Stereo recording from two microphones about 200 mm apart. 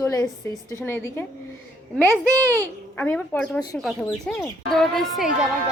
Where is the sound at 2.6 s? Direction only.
10° left (ahead or behind).